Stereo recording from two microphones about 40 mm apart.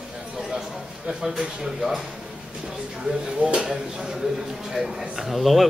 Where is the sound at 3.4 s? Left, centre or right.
Right.